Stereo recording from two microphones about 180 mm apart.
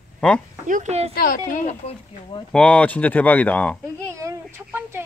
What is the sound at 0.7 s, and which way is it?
Speech, 40° right (ahead or behind).